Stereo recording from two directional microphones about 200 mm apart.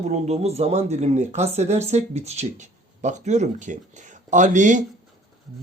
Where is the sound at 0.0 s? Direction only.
35° right (ahead or behind).